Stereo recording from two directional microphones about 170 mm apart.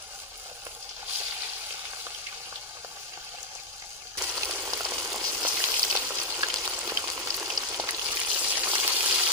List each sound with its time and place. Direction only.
4.4 s water: 5° right (ahead or behind)
4.7 s boiling: 10° right (ahead or behind)
5.3 s frying: 10° right (ahead or behind)